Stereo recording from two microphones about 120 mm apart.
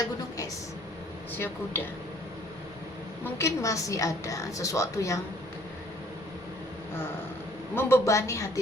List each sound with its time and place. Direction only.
1.3 s speech: 20° left (ahead or behind)
3.2 s a woman's voice: 20° left (ahead or behind)
7.8 s a woman's voice: 20° left (ahead or behind)